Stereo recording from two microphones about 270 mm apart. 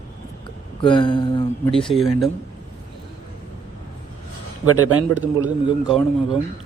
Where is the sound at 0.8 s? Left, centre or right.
Centre.